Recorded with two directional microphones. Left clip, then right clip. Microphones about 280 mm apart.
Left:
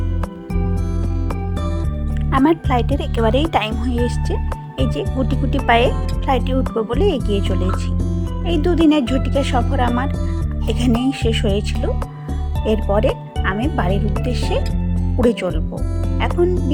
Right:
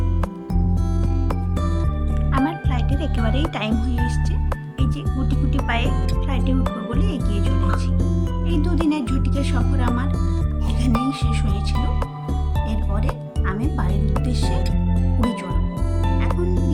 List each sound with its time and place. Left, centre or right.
2.4 s speech: centre
7.7 s speech: centre
8.4 s speech: centre
12.6 s speech: centre
13.7 s speech: centre
16.3 s speech: centre